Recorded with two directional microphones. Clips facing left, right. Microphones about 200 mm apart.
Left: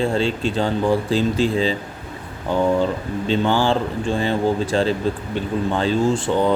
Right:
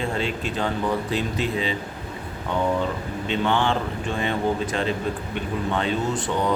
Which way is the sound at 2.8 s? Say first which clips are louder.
Left 5 dB; 30° left (ahead or behind).